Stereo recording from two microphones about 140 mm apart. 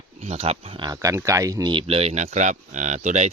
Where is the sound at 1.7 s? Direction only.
45° right (ahead or behind).